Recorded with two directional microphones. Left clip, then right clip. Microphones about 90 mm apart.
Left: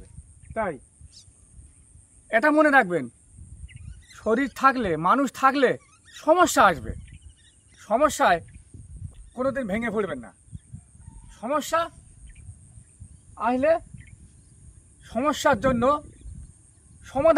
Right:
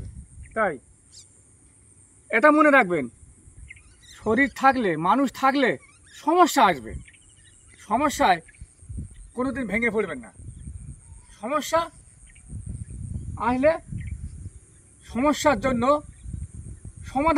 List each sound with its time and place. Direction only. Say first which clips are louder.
1.1 s a sound: right 2 dB; 10° right (ahead or behind)
2.2 s a man's voice: right 2 dB; 30° left (ahead or behind)
4.2 s speech: right 2 dB; 20° left (ahead or behind)
4.6 s a man's voice: left 1 dB; 35° left (ahead or behind)
11.3 s speech: right 1 dB; 50° left (ahead or behind)
13.4 s speech: even; 45° left (ahead or behind)
15.0 s speech: right 1 dB; 50° left (ahead or behind)
17.0 s speech: left 3 dB; 45° left (ahead or behind)